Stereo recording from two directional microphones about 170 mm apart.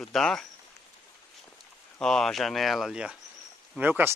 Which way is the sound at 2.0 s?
5° left (ahead or behind).